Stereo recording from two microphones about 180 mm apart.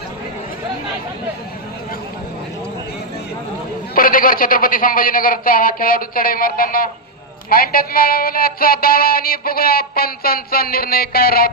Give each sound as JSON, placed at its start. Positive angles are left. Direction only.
{"t": 3.9, "sound": "speech", "side_deg": 50}